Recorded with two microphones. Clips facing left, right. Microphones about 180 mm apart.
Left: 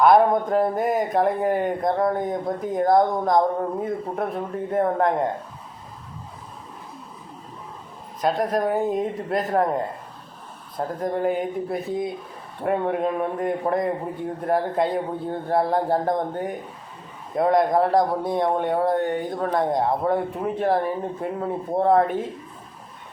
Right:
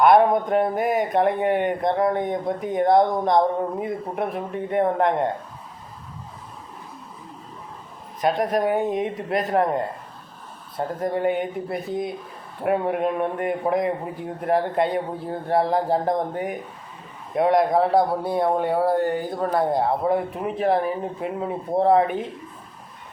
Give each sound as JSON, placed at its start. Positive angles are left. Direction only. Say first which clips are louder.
{"t": 0.0, "sound": "speech", "louder": "even", "side_deg": 0}
{"t": 8.2, "sound": "speech", "louder": "right 1 dB", "side_deg": 0}